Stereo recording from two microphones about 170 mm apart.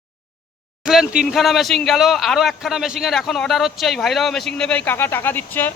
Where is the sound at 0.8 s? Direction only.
5° right (ahead or behind).